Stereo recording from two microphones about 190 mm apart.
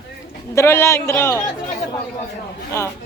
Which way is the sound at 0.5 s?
15° left (ahead or behind).